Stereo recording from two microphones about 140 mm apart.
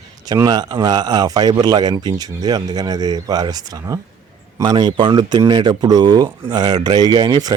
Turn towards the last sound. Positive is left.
turn(degrees=-30)  # may be behind; listen again after turning